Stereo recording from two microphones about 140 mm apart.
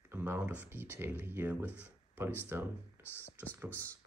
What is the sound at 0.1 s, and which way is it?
Speech, 15° right (ahead or behind).